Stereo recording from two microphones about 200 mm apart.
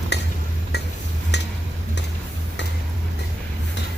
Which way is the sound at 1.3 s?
60° left (ahead or behind).